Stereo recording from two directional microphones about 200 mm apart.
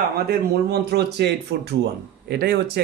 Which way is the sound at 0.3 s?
55° right (ahead or behind).